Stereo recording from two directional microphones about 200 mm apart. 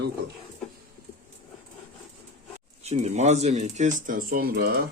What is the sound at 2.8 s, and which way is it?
Speech, 35° right (ahead or behind).